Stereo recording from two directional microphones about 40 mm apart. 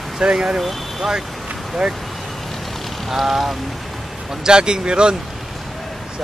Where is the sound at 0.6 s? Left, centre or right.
Centre.